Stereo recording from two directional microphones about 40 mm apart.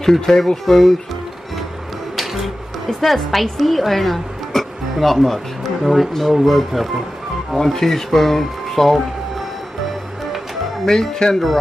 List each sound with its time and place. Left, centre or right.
0.0 s speech: centre
2.1 s music: centre
2.9 s a woman's voice: centre
7.5 s speech: centre
10.9 s speech: centre